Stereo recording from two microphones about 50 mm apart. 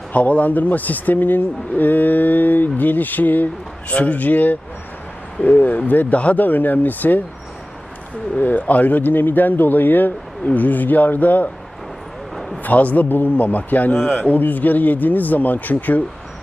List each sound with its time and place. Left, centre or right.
0.1 s speech: left
8.4 s speech: left
12.6 s speech: left